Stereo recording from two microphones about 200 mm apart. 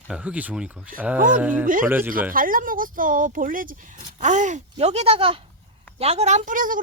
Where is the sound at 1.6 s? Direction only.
45° right (ahead or behind).